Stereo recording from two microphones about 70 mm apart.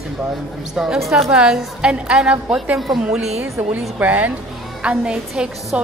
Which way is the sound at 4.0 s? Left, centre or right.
Right.